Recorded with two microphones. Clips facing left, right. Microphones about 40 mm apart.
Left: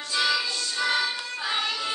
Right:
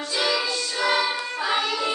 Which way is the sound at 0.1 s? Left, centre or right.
Centre.